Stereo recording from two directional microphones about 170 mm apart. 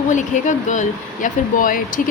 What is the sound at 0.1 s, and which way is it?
Speech, 45° left (ahead or behind).